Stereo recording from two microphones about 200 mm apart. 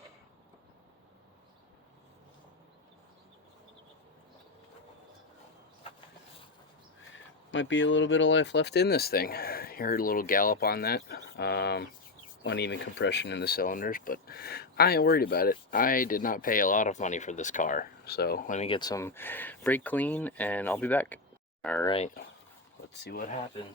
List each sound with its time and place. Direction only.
7.1 s speech: 65° left (ahead or behind); by 18.7 s 40° left (ahead or behind)
18.7 s speech: 20° left (ahead or behind)
21.8 s speech: 30° left (ahead or behind)
22.9 s speech: 50° left (ahead or behind)